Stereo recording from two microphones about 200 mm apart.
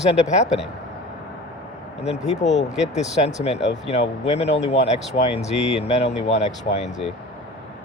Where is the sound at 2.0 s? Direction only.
35° left (ahead or behind).